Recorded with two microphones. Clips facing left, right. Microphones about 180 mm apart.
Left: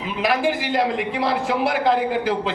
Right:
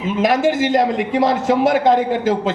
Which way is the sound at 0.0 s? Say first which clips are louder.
Right 5 dB; 45° right (ahead or behind).